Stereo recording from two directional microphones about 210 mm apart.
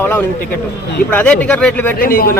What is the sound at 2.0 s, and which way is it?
Speech, 45° left (ahead or behind).